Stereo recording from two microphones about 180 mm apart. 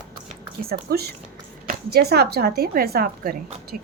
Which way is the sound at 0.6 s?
60° right (ahead or behind).